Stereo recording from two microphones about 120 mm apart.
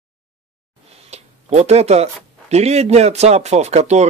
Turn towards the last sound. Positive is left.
turn(degrees=-70)  # may be behind; listen again after turning